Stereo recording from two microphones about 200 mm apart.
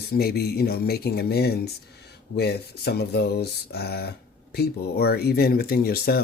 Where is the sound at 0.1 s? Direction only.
50° left (ahead or behind).